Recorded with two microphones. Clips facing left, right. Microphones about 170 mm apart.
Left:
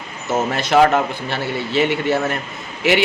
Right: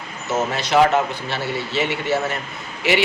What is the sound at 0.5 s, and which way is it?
A man's voice, 55° left (ahead or behind).